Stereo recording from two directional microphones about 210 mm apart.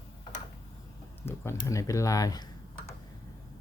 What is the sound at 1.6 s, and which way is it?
Speech, 15° left (ahead or behind).